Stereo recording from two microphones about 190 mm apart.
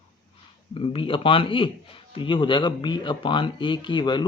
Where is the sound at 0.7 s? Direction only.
25° left (ahead or behind).